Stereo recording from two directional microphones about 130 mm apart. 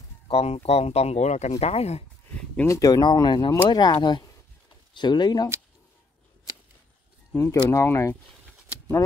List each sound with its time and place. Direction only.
0.3 s speech: 50° left (ahead or behind)
2.3 s a sound: 10° left (ahead or behind)
2.7 s speech: 25° left (ahead or behind)
7.5 s speech: 20° left (ahead or behind)